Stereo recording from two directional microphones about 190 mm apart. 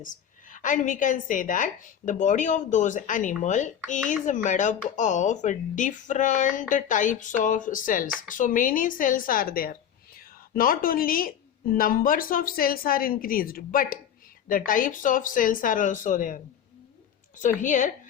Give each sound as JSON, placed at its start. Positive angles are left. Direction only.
{"t": 0.0, "sound": "a woman's voice", "side_deg": 45}